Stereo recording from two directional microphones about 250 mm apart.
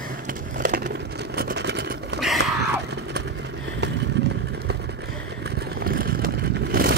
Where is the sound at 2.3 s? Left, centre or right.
Right.